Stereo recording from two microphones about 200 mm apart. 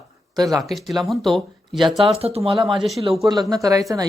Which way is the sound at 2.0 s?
30° right (ahead or behind).